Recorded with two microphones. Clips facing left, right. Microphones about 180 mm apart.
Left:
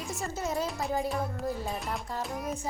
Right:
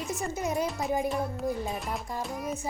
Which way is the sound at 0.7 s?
Centre (ahead or behind).